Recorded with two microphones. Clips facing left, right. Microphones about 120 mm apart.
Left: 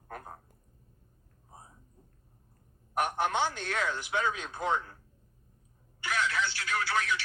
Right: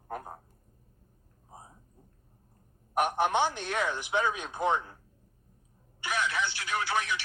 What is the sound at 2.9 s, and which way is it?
Speech, 15° right (ahead or behind).